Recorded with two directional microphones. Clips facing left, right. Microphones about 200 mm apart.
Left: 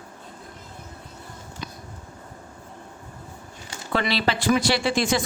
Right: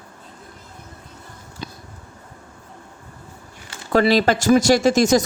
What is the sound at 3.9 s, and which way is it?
Speech, 45° right (ahead or behind).